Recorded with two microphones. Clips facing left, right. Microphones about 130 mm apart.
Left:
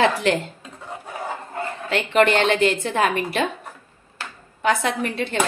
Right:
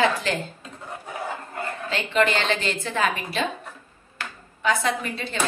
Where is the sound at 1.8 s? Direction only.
60° left (ahead or behind).